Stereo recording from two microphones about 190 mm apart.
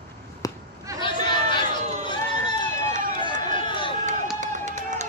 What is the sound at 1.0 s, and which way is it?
Run, 25° left (ahead or behind).